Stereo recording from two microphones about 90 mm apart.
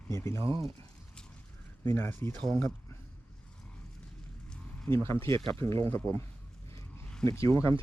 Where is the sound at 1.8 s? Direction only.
25° left (ahead or behind).